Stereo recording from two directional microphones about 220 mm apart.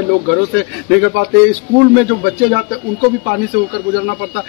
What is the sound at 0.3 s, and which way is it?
A man's voice, 55° right (ahead or behind).